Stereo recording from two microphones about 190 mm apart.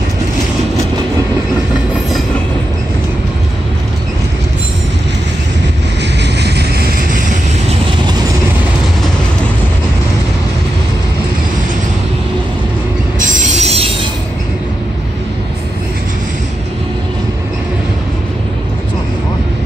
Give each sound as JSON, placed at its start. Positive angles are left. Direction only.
{"t": 6.2, "sound": "vehicle", "side_deg": -60}
{"t": 13.6, "sound": "train", "side_deg": -35}